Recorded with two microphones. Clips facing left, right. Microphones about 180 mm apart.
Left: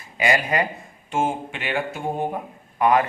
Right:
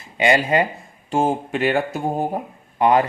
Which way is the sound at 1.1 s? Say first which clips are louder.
Right 4 dB; 35° right (ahead or behind).